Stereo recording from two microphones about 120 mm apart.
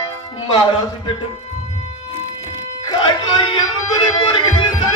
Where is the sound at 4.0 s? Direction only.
45° left (ahead or behind).